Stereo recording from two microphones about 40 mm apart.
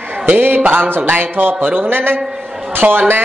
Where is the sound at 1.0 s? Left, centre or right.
Right.